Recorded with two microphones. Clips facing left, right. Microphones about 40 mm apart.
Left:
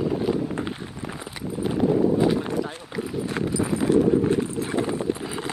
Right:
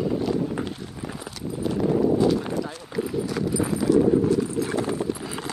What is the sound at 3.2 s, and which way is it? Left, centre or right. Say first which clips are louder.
Clip-clop: even; left.